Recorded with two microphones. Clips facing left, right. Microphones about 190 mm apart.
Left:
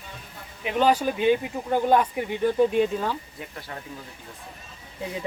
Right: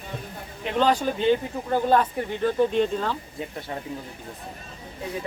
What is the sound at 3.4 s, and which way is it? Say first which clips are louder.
Speech: right 5 dB; 25° right (ahead or behind).